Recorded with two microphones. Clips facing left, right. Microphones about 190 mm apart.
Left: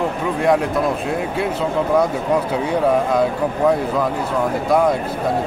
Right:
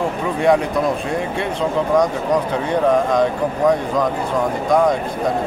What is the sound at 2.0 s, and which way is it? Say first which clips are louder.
Speech: right 1 dB; 5° left (ahead or behind).